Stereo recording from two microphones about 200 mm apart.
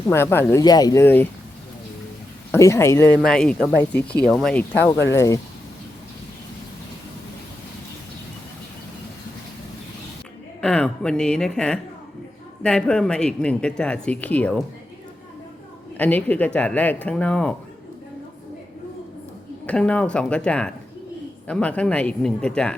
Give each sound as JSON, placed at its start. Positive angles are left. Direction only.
{"t": 0.1, "sound": "speech", "side_deg": 10}
{"t": 2.5, "sound": "speech", "side_deg": 15}
{"t": 3.2, "sound": "speech", "side_deg": 5}
{"t": 10.6, "sound": "speech", "side_deg": 5}
{"t": 16.0, "sound": "speech", "side_deg": 10}
{"t": 19.6, "sound": "speech", "side_deg": 5}